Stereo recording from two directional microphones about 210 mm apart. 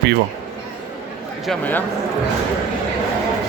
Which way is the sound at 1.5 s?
10° left (ahead or behind).